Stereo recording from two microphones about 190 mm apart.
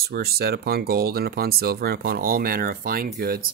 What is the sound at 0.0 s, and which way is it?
Speech, 55° right (ahead or behind).